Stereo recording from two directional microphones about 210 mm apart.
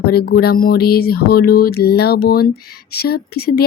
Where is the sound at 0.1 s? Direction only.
45° left (ahead or behind).